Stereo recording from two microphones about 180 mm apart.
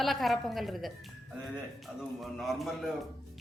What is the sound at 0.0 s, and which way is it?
A woman's voice, centre (ahead or behind).